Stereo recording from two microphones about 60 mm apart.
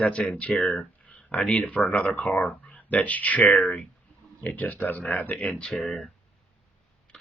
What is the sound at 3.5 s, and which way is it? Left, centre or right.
Speech, centre.